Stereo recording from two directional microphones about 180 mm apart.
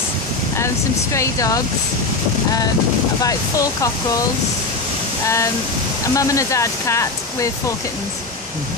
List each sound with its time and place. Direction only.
1.1 s speech: 15° left (ahead or behind)
3.2 s chopping: 20° left (ahead or behind)
5.2 s speech: 15° left (ahead or behind)